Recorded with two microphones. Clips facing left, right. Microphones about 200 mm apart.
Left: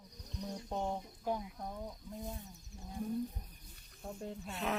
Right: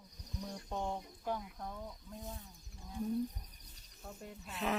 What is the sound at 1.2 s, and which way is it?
Speech, 15° left (ahead or behind).